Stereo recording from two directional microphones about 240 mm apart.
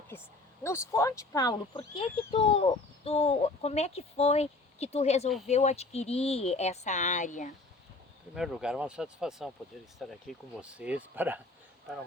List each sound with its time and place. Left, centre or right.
0.6 s speech: centre; by 7.5 s left
8.4 s speech: centre